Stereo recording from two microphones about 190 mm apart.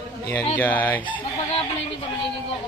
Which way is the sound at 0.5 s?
10° left (ahead or behind).